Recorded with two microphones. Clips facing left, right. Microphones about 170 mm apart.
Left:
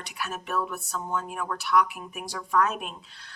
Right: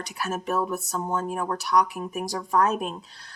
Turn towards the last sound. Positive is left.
turn(degrees=-40)  # may be behind; listen again after turning